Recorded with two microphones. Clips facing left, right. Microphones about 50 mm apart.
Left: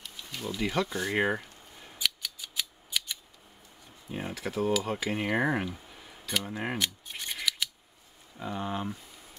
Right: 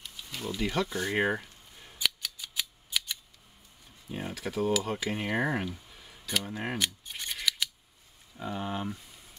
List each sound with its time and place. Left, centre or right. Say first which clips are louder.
0.6 s speech: left 1 dB; centre
1.0 s a sound: even; centre
2.0 s scissors: right 1 dB; centre
4.1 s speech: left 1 dB; centre
5.9 s a sound: left 3 dB; centre
6.2 s scissors: left 1 dB; centre
8.4 s speech: left 1 dB; centre